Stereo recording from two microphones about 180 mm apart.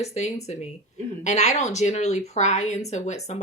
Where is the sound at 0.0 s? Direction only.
35° left (ahead or behind).